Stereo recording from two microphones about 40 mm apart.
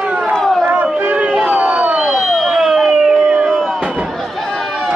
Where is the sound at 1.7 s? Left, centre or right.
Right.